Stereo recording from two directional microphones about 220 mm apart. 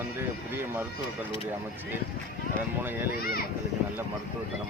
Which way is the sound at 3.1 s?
45° left (ahead or behind).